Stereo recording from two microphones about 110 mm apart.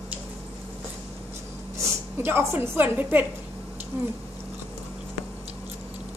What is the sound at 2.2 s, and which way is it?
A woman's voice, 20° right (ahead or behind).